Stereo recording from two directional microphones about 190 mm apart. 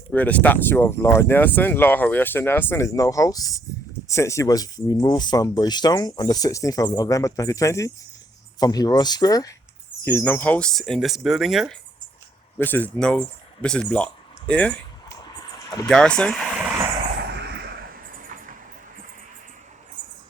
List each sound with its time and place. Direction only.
0.1 s speech: 10° left (ahead or behind)
12.5 s speech: 10° left (ahead or behind)
15.2 s a sound: 20° left (ahead or behind)
15.9 s speech: 5° left (ahead or behind)
17.2 s vehicle: 60° right (ahead or behind)